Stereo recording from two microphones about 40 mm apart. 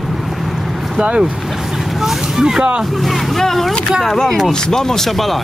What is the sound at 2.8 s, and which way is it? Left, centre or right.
Speech, centre.